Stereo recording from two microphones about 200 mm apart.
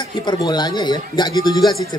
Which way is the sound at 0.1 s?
20° left (ahead or behind).